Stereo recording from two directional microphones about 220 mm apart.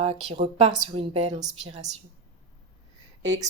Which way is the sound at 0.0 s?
30° right (ahead or behind).